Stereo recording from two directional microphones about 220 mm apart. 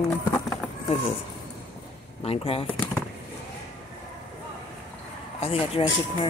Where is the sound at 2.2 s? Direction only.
25° left (ahead or behind).